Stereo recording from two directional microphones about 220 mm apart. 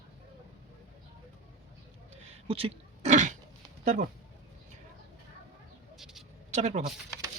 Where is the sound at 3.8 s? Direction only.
35° right (ahead or behind).